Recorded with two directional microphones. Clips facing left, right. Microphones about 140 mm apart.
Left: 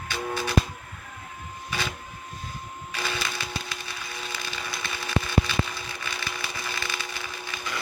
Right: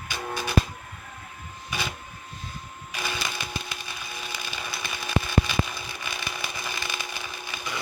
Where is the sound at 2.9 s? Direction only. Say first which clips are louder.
Left 1 dB; 15° right (ahead or behind).